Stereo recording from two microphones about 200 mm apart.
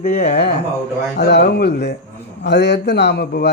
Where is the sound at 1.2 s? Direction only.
55° left (ahead or behind).